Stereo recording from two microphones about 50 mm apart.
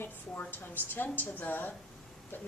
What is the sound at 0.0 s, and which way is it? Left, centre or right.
A woman's voice, left.